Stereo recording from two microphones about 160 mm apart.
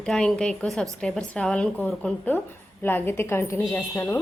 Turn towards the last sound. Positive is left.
turn(degrees=15)  # may be behind; listen again after turning